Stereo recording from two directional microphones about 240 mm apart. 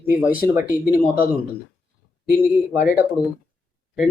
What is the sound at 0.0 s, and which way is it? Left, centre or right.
Speech, centre.